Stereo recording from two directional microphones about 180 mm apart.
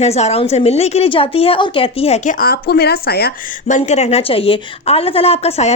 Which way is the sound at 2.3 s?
60° left (ahead or behind).